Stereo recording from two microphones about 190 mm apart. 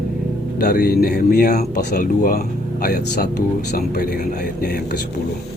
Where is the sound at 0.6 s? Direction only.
55° left (ahead or behind).